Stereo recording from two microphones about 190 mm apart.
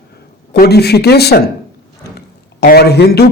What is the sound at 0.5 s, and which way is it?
A man's voice, 60° left (ahead or behind).